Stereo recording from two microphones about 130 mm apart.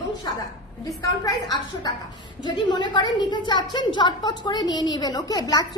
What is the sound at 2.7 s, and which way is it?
A woman's voice, 35° left (ahead or behind).